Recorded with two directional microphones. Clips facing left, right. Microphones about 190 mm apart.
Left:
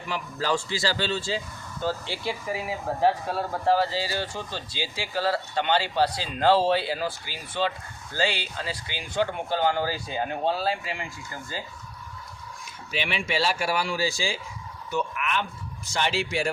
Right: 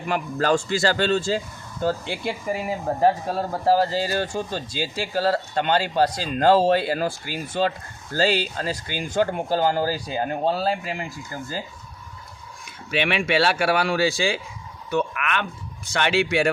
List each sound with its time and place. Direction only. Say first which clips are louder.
0.1 s speech: right 6 dB; 50° right (ahead or behind)
12.9 s speech: right 7 dB; 65° right (ahead or behind)
14.8 s a sound: right 4 dB; 65° right (ahead or behind)
15.9 s speech: right 6 dB; 65° right (ahead or behind)